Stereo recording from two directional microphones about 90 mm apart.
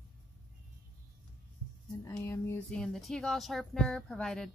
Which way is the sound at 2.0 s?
30° left (ahead or behind).